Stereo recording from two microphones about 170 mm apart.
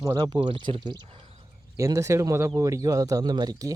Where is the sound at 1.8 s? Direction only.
20° right (ahead or behind).